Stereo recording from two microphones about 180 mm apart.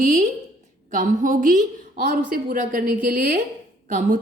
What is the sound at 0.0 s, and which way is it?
A woman's voice, 45° right (ahead or behind).